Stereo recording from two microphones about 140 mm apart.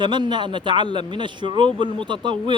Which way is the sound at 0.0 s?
35° right (ahead or behind).